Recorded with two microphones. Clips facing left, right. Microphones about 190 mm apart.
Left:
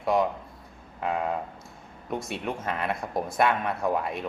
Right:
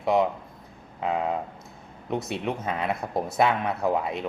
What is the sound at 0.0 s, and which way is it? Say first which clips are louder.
Speech: right 2 dB; 20° right (ahead or behind).